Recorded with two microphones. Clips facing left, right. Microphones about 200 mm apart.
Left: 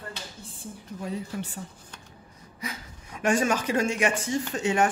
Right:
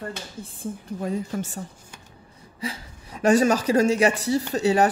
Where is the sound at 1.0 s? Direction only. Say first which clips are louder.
Right 5 dB; 45° right (ahead or behind).